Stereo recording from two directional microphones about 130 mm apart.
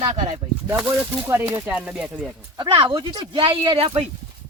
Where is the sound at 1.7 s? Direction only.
10° right (ahead or behind).